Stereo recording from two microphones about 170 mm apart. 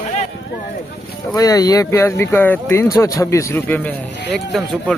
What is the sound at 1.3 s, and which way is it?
A man's voice, 20° left (ahead or behind).